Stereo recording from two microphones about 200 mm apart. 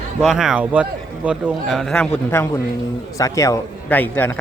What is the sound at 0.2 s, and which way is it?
A man's voice, centre (ahead or behind).